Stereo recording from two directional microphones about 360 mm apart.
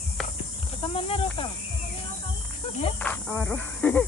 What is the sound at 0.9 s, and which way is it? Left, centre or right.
Speech, centre.